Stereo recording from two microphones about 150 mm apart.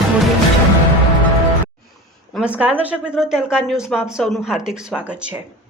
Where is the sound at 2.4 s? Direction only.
10° right (ahead or behind).